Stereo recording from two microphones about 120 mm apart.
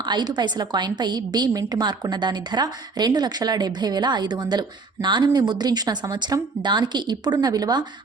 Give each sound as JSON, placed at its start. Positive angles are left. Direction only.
{"t": 0.0, "sound": "a woman's voice", "side_deg": -40}